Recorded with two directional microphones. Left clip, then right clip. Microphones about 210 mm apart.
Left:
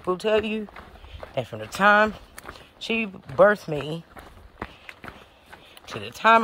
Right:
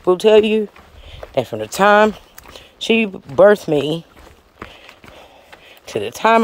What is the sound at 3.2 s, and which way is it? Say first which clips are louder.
Speech: right 6 dB; 35° right (ahead or behind).